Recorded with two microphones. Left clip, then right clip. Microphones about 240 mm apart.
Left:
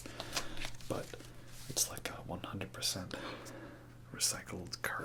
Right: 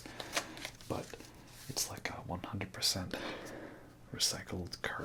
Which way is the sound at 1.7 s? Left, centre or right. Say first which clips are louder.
Left 1 dB; right.